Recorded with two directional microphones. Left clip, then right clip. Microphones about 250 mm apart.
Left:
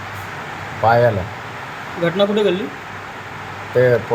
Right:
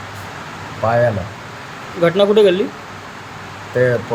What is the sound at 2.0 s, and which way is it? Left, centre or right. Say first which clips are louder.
Speech: right 5 dB; centre.